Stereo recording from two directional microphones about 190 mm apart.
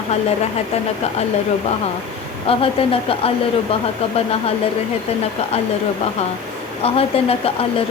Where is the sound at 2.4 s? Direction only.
30° left (ahead or behind).